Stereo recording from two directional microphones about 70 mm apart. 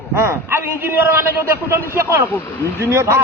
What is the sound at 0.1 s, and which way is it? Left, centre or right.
A man's voice, right.